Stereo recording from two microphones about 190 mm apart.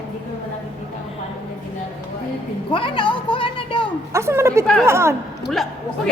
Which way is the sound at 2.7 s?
25° left (ahead or behind).